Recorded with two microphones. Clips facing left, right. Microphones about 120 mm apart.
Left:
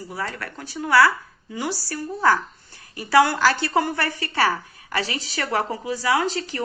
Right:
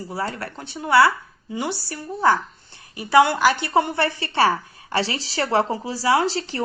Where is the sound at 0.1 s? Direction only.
30° right (ahead or behind).